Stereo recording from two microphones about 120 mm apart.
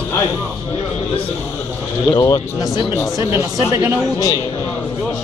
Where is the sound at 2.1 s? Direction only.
35° left (ahead or behind).